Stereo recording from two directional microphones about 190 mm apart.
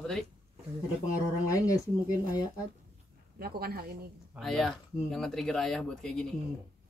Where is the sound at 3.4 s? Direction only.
55° right (ahead or behind).